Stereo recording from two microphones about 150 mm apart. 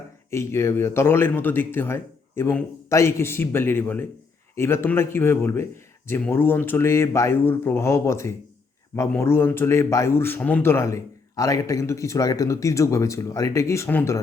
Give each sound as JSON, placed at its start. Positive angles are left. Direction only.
{"t": 0.3, "sound": "a man's voice", "side_deg": 20}